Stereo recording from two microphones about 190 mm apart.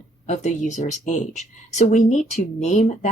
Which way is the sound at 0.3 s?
40° left (ahead or behind).